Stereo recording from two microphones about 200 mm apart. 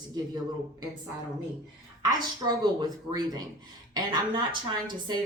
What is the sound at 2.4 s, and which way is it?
Speech, 20° right (ahead or behind).